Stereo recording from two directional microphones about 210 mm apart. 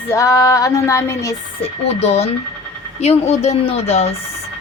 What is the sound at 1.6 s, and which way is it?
A woman's voice, 30° left (ahead or behind).